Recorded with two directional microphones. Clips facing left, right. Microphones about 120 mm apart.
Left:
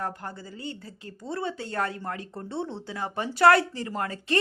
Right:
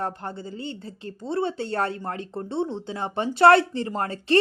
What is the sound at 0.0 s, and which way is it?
A woman's voice, 25° right (ahead or behind).